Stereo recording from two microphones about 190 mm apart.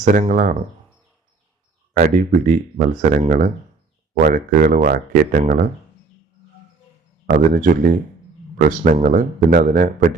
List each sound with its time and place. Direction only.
0.0 s speech: 40° right (ahead or behind)
2.0 s speech: 40° right (ahead or behind)
7.3 s speech: 45° right (ahead or behind)